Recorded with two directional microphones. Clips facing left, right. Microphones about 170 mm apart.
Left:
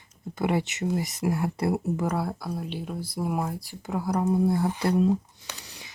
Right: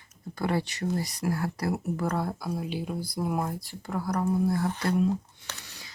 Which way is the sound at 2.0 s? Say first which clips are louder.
Left 1 dB; 10° left (ahead or behind).